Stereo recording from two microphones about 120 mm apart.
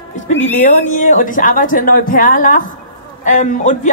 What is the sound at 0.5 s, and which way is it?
A woman's voice, 85° left.